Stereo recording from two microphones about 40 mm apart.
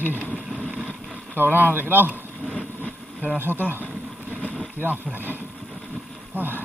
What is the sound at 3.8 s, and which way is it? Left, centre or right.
Vehicle, right.